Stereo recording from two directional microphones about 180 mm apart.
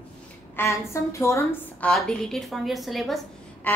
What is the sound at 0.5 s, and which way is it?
A woman's voice, 15° left (ahead or behind).